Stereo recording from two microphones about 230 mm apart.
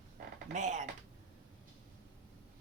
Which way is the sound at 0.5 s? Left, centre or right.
Right.